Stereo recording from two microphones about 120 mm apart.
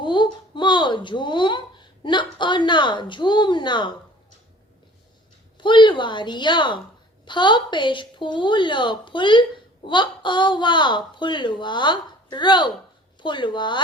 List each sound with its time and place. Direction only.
0.0 s a woman's voice: 40° left (ahead or behind)
5.5 s speech: 40° left (ahead or behind)